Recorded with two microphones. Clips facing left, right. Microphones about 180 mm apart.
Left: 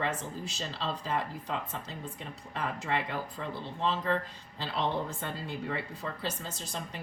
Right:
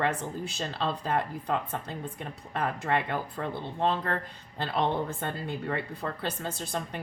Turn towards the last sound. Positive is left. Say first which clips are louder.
# right 6 dB
turn(degrees=-60)  # may be behind; listen again after turning